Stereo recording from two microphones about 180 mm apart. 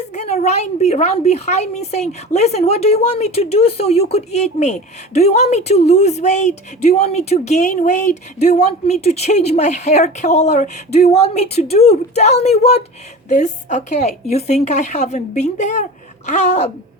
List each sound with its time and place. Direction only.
0.1 s a woman's voice: 35° left (ahead or behind)